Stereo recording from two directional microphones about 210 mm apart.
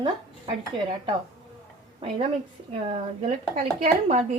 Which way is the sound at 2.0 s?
25° right (ahead or behind).